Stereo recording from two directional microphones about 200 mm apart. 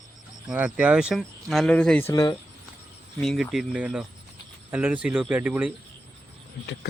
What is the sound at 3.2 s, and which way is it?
Speech, centre (ahead or behind).